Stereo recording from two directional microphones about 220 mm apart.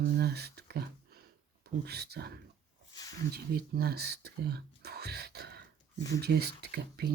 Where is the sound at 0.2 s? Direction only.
45° right (ahead or behind).